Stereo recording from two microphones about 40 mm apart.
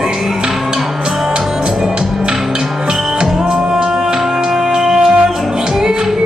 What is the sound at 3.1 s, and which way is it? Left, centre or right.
Music, centre.